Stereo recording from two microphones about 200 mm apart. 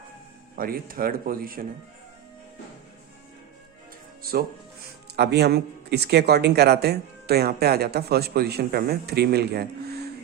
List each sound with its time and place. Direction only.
0.5 s speech: 45° right (ahead or behind)
4.2 s speech: 50° right (ahead or behind)